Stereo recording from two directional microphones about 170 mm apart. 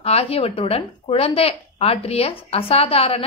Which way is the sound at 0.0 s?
35° left (ahead or behind).